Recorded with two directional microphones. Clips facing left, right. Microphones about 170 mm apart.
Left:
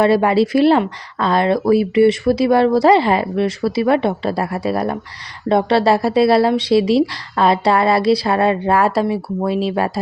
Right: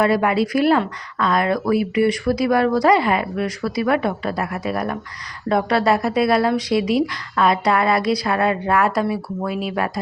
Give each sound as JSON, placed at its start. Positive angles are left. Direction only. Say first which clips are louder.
{"t": 0.0, "sound": "speech", "louder": "left 4 dB", "side_deg": 30}